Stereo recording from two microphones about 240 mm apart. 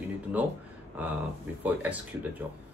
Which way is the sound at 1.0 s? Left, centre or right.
Centre.